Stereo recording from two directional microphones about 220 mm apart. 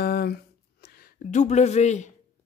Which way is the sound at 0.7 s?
45° left (ahead or behind).